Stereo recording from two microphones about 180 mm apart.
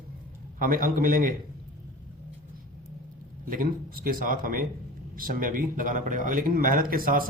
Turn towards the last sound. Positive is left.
turn(degrees=-50)  # may be behind; listen again after turning